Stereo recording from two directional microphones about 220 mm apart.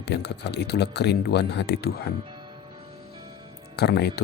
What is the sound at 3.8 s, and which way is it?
Speech, 45° left (ahead or behind).